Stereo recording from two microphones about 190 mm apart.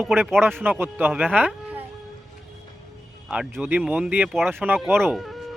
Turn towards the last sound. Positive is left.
turn(degrees=-5)  # may be behind; listen again after turning